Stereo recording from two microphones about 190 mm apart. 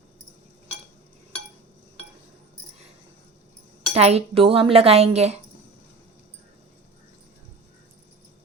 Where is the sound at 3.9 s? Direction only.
35° right (ahead or behind).